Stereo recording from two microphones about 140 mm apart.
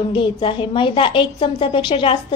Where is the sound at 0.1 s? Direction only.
40° left (ahead or behind).